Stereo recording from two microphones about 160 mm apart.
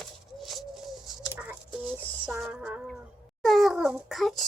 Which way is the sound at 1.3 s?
10° right (ahead or behind).